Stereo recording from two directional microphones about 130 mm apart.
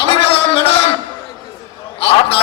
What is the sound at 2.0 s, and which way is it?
Speech, 50° left (ahead or behind).